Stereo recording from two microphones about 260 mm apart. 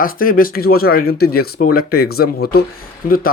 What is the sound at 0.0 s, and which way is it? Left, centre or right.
Speech, left.